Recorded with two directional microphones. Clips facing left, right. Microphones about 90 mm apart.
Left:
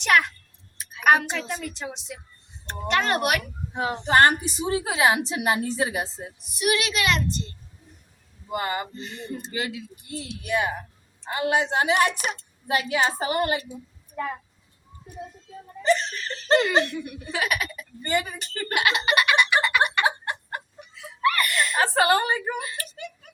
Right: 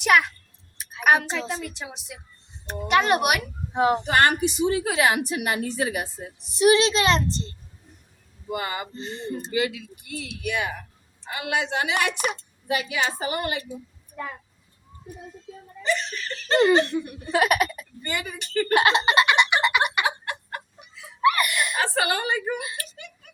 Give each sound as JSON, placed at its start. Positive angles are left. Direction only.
{"t": 0.0, "sound": "a woman's voice", "side_deg": -5}
{"t": 1.7, "sound": "a woman's voice", "side_deg": -5}
{"t": 4.0, "sound": "a woman's voice", "side_deg": 35}
{"t": 6.5, "sound": "a woman's voice", "side_deg": -30}
{"t": 8.4, "sound": "speech", "side_deg": 30}
{"t": 9.0, "sound": "speech", "side_deg": -30}
{"t": 9.5, "sound": "speech", "side_deg": 30}
{"t": 15.8, "sound": "speech", "side_deg": 35}
{"t": 16.6, "sound": "speech", "side_deg": -30}
{"t": 18.0, "sound": "speech", "side_deg": 35}
{"t": 18.7, "sound": "a sound", "side_deg": -30}
{"t": 20.1, "sound": "a sound", "side_deg": 30}
{"t": 21.2, "sound": "whimper", "side_deg": -15}
{"t": 21.8, "sound": "a woman's voice", "side_deg": 35}